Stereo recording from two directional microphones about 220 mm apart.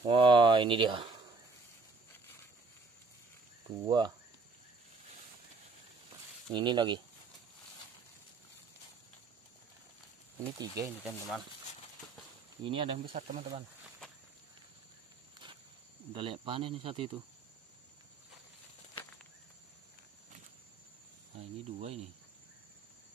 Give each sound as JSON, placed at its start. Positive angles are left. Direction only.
{"t": 0.0, "sound": "speech", "side_deg": -20}
{"t": 3.8, "sound": "speech", "side_deg": -20}
{"t": 6.5, "sound": "speech", "side_deg": -20}
{"t": 10.4, "sound": "speech", "side_deg": -15}
{"t": 12.6, "sound": "speech", "side_deg": -25}
{"t": 13.1, "sound": "speech", "side_deg": -35}
{"t": 13.8, "sound": "cricket", "side_deg": 0}
{"t": 16.1, "sound": "speech", "side_deg": -25}
{"t": 21.4, "sound": "cricket", "side_deg": -30}